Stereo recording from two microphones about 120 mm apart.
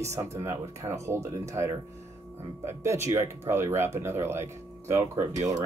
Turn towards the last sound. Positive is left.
turn(degrees=-25)  # may be behind; listen again after turning